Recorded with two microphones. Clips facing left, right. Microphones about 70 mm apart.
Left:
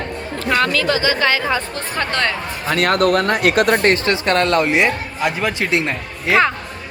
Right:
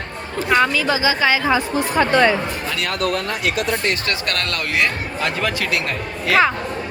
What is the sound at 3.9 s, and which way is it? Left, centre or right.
Speech, left.